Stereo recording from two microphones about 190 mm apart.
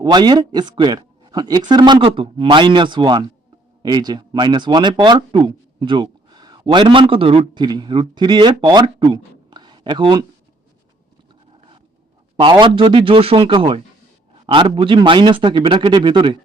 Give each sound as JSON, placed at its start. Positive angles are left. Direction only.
{"t": 0.0, "sound": "speech", "side_deg": -20}
{"t": 12.4, "sound": "speech", "side_deg": -25}